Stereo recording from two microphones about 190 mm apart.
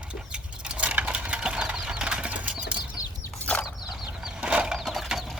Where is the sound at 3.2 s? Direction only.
5° left (ahead or behind).